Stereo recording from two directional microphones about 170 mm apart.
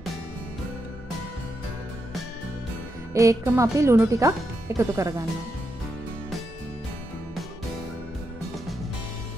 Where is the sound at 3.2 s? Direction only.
15° right (ahead or behind).